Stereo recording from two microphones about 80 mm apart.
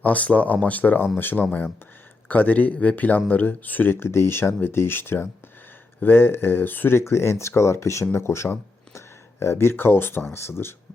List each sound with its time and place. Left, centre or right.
0.0 s speech: centre